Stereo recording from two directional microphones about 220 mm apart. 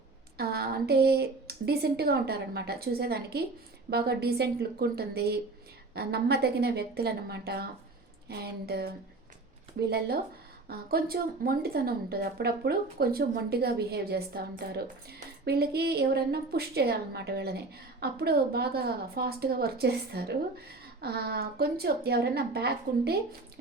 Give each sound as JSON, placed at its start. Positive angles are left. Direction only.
{"t": 0.3, "sound": "a woman's voice", "side_deg": -45}
{"t": 10.7, "sound": "a woman's voice", "side_deg": -45}